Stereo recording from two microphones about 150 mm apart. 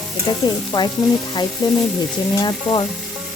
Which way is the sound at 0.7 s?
25° left (ahead or behind).